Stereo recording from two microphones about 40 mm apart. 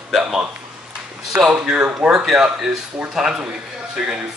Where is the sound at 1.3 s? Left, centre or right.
Right.